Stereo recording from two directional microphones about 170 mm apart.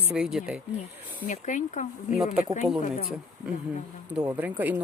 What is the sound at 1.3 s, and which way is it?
Speech, 45° left (ahead or behind).